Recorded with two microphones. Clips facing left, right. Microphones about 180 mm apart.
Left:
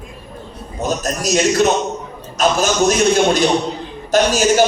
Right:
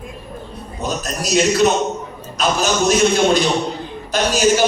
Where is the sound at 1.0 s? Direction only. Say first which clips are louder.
Even; 45° left (ahead or behind).